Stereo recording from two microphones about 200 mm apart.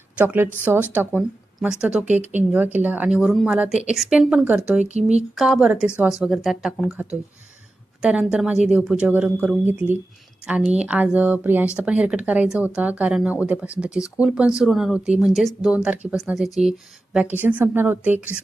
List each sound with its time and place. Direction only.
0.2 s speech: 10° right (ahead or behind)
4.9 s speech: 35° right (ahead or behind)
5.3 s speech: centre (ahead or behind)